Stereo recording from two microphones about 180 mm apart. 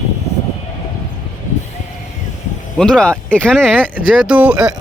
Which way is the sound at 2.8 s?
5° left (ahead or behind).